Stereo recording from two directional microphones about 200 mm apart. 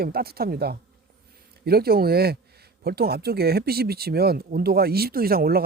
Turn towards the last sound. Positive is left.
turn(degrees=-50)  # may be behind; listen again after turning